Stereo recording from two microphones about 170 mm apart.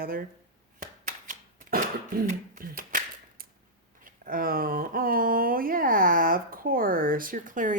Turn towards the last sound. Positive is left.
turn(degrees=-50)  # may be behind; listen again after turning